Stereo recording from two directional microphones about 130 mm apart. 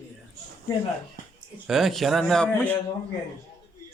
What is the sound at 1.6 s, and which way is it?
A man's voice, centre (ahead or behind).